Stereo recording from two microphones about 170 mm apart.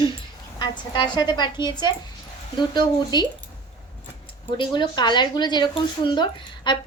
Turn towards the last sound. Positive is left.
turn(degrees=25)  # may be behind; listen again after turning